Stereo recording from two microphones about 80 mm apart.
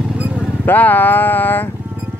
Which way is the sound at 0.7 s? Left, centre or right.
Left.